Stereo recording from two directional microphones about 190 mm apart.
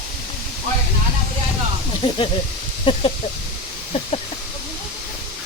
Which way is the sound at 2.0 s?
30° left (ahead or behind).